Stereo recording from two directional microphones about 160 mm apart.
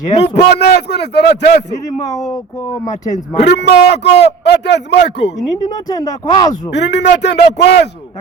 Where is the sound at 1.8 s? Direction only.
20° left (ahead or behind).